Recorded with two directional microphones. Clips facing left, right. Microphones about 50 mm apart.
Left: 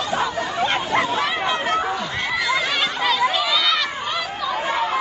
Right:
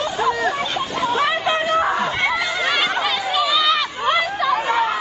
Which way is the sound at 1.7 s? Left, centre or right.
Right.